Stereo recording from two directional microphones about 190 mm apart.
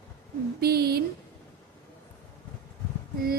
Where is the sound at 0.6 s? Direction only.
55° right (ahead or behind).